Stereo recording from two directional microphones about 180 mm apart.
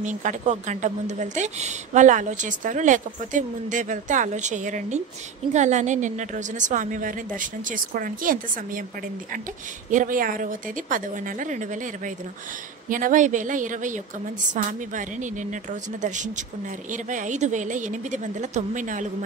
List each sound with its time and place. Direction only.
0.0 s a woman's voice: 45° right (ahead or behind)
9.8 s a woman's voice: 50° right (ahead or behind)